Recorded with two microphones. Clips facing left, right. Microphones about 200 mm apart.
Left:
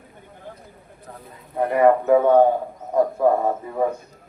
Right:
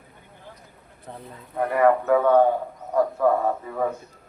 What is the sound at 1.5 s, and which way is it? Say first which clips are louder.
Speech: left 3 dB; 25° left (ahead or behind).